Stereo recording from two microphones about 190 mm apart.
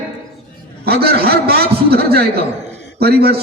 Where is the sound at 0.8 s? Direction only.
55° right (ahead or behind).